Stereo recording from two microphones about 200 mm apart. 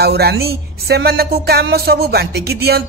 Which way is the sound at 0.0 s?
50° right (ahead or behind).